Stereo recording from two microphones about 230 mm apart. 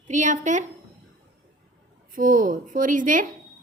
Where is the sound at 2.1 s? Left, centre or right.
Right.